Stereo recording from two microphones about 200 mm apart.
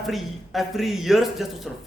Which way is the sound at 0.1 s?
Centre (ahead or behind).